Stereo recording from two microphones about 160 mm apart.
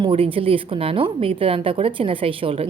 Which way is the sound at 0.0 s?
35° right (ahead or behind).